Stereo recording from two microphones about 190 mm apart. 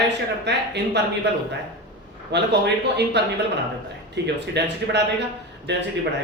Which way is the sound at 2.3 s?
65° right (ahead or behind).